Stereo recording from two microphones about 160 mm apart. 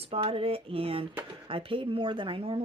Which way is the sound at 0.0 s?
35° right (ahead or behind).